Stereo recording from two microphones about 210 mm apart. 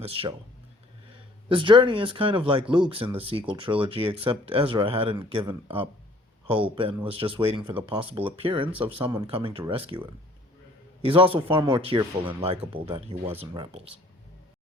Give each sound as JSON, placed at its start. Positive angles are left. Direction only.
{"t": 0.2, "sound": "speech", "side_deg": -25}
{"t": 1.5, "sound": "speech", "side_deg": -25}
{"t": 11.0, "sound": "speech", "side_deg": -25}